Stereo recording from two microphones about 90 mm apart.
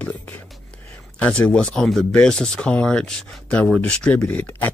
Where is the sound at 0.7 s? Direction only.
15° left (ahead or behind).